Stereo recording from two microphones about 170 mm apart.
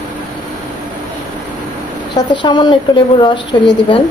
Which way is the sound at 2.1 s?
25° left (ahead or behind).